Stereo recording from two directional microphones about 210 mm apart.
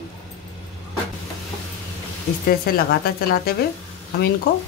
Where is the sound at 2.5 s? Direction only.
45° left (ahead or behind).